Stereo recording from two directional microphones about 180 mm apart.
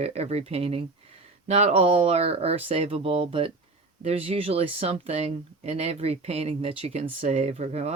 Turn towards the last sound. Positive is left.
turn(degrees=-35)  # may be behind; listen again after turning